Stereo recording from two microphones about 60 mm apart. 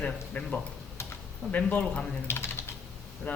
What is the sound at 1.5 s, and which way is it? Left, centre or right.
Speech, left.